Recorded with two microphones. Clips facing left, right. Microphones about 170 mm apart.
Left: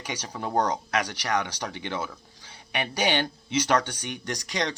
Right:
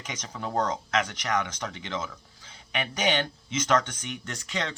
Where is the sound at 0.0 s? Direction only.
35° left (ahead or behind).